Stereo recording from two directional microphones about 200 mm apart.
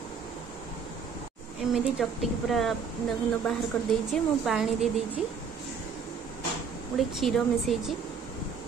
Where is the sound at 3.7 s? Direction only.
5° left (ahead or behind).